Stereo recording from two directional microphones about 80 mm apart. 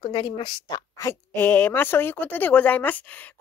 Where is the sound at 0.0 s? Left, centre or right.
Left.